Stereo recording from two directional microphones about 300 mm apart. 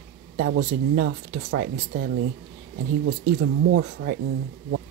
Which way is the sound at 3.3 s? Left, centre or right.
Right.